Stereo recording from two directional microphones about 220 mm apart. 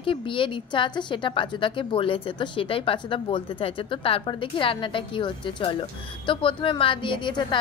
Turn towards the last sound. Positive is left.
turn(degrees=20)  # may be behind; listen again after turning